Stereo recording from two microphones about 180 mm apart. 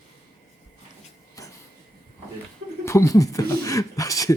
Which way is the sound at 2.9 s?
15° left (ahead or behind).